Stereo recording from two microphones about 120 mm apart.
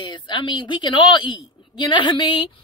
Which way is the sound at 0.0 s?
40° left (ahead or behind).